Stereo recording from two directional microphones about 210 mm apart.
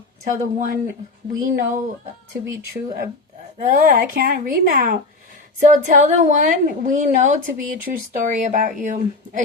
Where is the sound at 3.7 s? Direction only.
40° right (ahead or behind).